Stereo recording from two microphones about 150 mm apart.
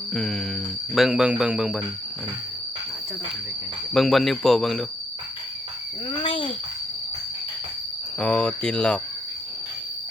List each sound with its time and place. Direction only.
0.1 s speech: centre (ahead or behind)
3.9 s speech: centre (ahead or behind)
6.1 s a sound: 35° left (ahead or behind)
8.2 s speech: 5° left (ahead or behind)